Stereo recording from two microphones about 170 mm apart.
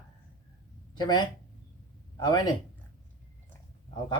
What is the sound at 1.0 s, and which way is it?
Speech, 25° left (ahead or behind).